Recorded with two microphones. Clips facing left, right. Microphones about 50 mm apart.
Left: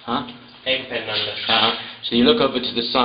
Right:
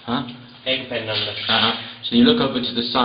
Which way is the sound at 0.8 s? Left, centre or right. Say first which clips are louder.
Even; centre.